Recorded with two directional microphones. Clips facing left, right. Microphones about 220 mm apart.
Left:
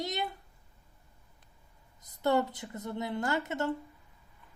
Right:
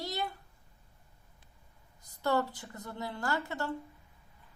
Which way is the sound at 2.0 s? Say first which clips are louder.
Left 3 dB; 20° left (ahead or behind).